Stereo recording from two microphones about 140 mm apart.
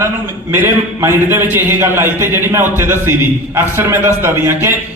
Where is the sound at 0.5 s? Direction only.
20° right (ahead or behind).